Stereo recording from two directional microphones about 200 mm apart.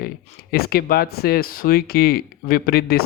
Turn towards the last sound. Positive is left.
turn(degrees=50)  # may be behind; listen again after turning